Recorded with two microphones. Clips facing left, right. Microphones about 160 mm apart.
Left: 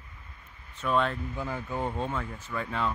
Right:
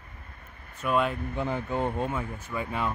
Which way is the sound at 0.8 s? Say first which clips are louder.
Right 1 dB; 10° right (ahead or behind).